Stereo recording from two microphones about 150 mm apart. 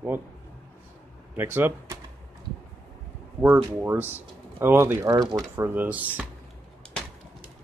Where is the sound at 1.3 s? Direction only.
15° right (ahead or behind).